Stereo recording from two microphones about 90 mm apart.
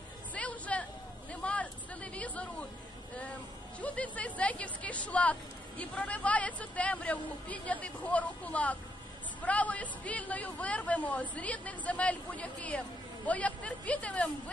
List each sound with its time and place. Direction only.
0.3 s music: 15° left (ahead or behind)
1.3 s a sound: 15° left (ahead or behind)
3.8 s a woman's voice: 15° left (ahead or behind)